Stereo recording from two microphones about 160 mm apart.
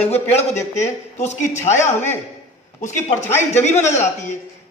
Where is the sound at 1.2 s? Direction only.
45° left (ahead or behind).